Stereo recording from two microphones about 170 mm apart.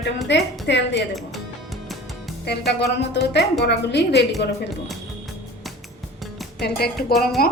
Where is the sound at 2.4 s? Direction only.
75° left (ahead or behind).